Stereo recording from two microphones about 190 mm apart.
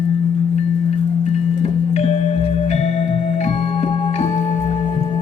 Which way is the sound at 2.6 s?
35° left (ahead or behind).